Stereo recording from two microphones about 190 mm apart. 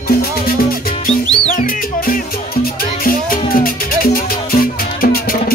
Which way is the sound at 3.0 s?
50° left (ahead or behind).